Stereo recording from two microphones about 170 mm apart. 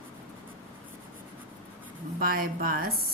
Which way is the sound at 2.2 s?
60° right (ahead or behind).